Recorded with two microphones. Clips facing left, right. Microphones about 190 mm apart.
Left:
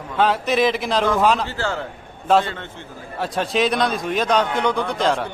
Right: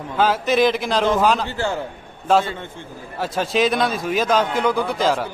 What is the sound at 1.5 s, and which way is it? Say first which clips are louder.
Speech: right 1 dB; 15° right (ahead or behind).